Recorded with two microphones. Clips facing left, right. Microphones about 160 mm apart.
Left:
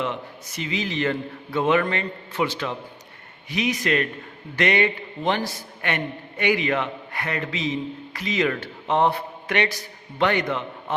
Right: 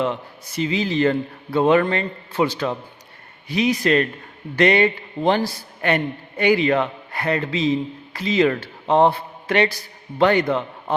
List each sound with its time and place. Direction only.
0.0 s a man's voice: 35° right (ahead or behind)